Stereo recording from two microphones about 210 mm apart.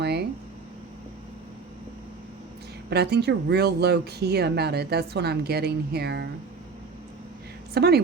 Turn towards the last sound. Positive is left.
turn(degrees=-50)  # may be behind; listen again after turning